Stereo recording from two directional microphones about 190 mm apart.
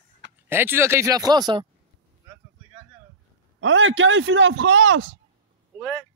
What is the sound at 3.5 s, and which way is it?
A man's voice, 90° right.